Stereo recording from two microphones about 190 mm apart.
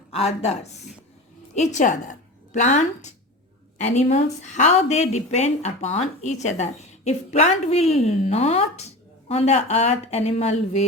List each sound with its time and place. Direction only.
0.1 s a woman's voice: 30° left (ahead or behind)